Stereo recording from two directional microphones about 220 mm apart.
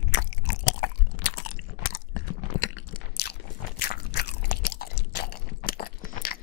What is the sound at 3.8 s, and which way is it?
Chewing, 45° left (ahead or behind).